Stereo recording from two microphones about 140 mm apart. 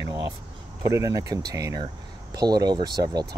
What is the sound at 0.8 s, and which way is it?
Speech, 20° right (ahead or behind).